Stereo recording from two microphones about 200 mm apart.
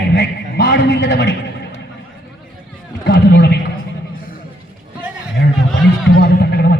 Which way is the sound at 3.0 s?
55° left (ahead or behind).